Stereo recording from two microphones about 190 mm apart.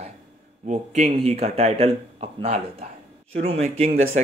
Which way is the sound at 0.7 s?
40° right (ahead or behind).